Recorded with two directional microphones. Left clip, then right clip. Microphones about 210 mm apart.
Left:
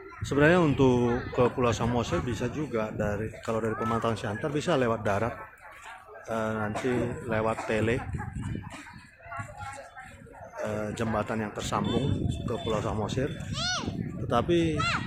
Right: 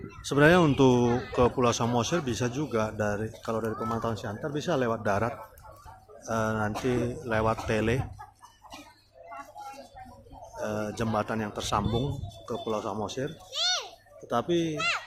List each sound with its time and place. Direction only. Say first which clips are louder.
0.3 s speech: right 2 dB; 5° right (ahead or behind)
1.0 s speech: right 1 dB; 40° right (ahead or behind)
1.4 s speech: right 1 dB; 10° right (ahead or behind)
10.6 s speech: even; centre (ahead or behind)
13.5 s a child's voice: right 6 dB; 35° right (ahead or behind)
14.3 s speech: left 2 dB; 10° left (ahead or behind)
14.8 s speech: even; 35° right (ahead or behind)